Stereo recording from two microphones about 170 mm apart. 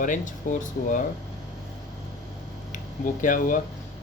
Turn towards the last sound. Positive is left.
turn(degrees=50)  # may be behind; listen again after turning